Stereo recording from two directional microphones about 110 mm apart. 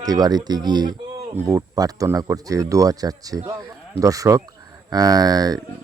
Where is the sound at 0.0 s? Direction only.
35° right (ahead or behind).